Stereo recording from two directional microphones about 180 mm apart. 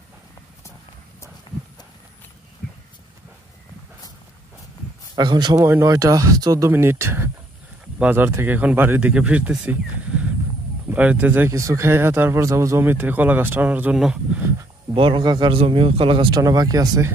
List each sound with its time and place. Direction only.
5.1 s speech: 25° right (ahead or behind); by 14.5 s 5° right (ahead or behind)
15.0 s speech: 25° right (ahead or behind)